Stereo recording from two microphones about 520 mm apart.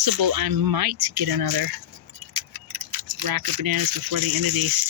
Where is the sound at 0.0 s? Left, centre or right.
Right.